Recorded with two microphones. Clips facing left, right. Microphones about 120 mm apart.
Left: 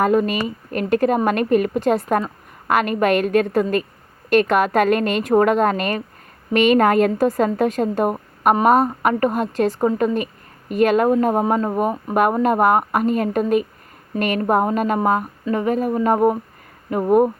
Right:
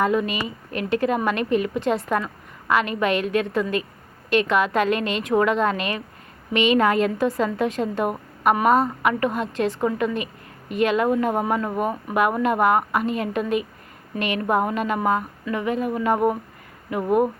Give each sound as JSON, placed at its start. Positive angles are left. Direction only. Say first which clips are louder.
{"t": 0.0, "sound": "a woman's voice", "louder": "left 4 dB", "side_deg": 50}
{"t": 12.3, "sound": "a woman's voice", "louder": "left 3 dB", "side_deg": 40}